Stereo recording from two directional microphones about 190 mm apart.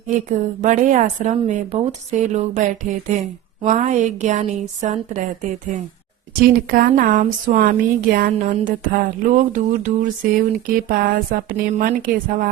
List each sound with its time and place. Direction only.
0.1 s speech: 40° right (ahead or behind)
6.4 s speech: 50° right (ahead or behind)